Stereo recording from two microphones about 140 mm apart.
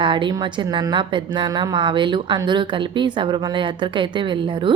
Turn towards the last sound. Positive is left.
turn(degrees=-35)  # may be behind; listen again after turning